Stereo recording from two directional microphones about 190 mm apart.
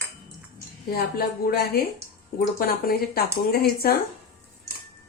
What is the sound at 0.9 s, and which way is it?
A woman's voice, 50° left (ahead or behind).